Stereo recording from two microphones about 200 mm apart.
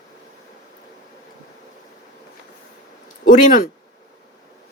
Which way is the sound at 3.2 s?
40° left (ahead or behind).